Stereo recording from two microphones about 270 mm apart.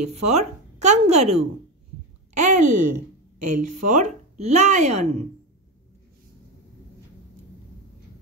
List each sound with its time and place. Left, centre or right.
0.3 s speech: right
2.3 s a sound: right
2.7 s a woman's voice: right
3.9 s speech: right